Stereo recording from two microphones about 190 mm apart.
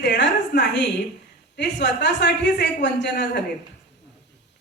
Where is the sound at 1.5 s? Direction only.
65° left (ahead or behind).